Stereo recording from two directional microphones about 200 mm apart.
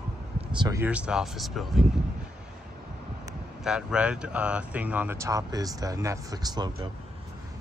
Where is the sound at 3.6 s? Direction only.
5° right (ahead or behind); by 6.9 s 20° right (ahead or behind).